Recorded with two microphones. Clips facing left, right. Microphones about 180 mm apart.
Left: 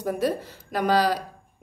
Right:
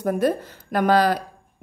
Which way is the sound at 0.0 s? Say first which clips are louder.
Right 4 dB; 55° right (ahead or behind).